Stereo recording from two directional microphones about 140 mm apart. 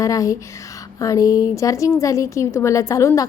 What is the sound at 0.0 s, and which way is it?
A woman's voice, 25° left (ahead or behind).